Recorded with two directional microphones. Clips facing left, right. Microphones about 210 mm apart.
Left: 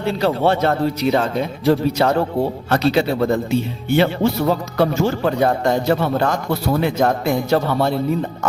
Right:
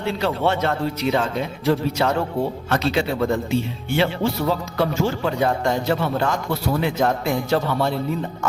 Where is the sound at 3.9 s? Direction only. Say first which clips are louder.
Left 5 dB; 45° left (ahead or behind).